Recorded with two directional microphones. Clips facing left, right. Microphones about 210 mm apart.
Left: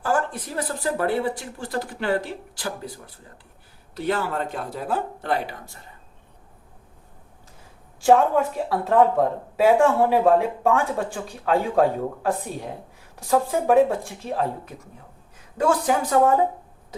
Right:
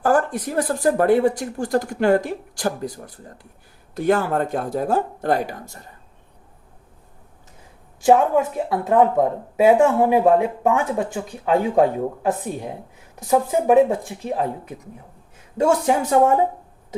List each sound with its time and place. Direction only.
0.0 s speech: 50° right (ahead or behind)
8.0 s speech: 20° right (ahead or behind)